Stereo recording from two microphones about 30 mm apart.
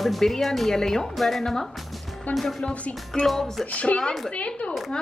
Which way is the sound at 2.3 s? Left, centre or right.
Left.